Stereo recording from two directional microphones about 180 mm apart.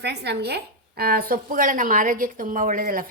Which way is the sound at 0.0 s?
65° right (ahead or behind).